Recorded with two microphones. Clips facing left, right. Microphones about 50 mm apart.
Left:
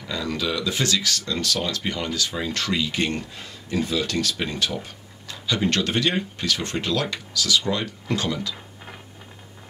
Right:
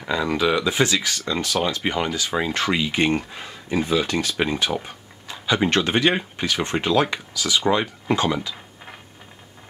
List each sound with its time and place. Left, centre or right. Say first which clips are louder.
0.0 s speech: right 6 dB; right